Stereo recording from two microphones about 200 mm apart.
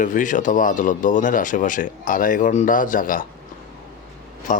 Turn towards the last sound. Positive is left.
turn(degrees=40)  # may be behind; listen again after turning